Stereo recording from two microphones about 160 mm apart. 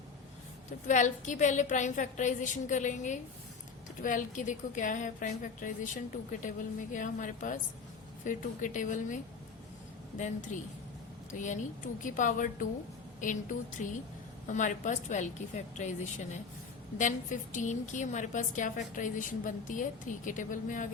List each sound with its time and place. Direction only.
0.9 s a woman's voice: 50° left (ahead or behind)
10.5 s a woman's voice: 50° left (ahead or behind)
17.0 s a woman's voice: 50° left (ahead or behind)